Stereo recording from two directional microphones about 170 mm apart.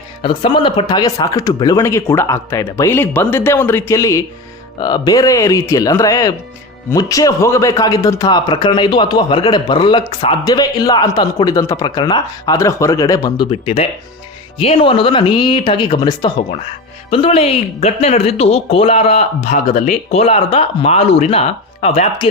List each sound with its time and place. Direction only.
0.2 s speech: 30° left (ahead or behind)
17.1 s speech: 35° left (ahead or behind)